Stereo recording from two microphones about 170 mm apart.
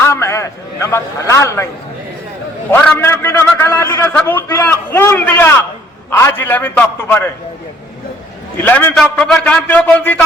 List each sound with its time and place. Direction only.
0.0 s a sound: 15° left (ahead or behind)
2.6 s a man's voice: 10° left (ahead or behind)
8.6 s a man's voice: 10° left (ahead or behind)